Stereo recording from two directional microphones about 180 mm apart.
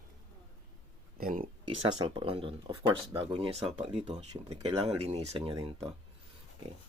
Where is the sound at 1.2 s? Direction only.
50° right (ahead or behind).